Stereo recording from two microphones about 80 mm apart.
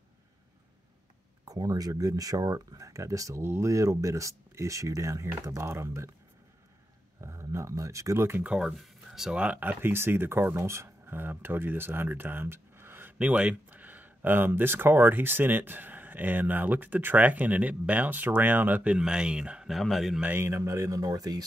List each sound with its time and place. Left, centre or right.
1.4 s speech: right
7.2 s speech: right
8.5 s speech: centre
9.4 s speech: centre
13.2 s speech: centre
19.7 s speech: centre
20.2 s speech: right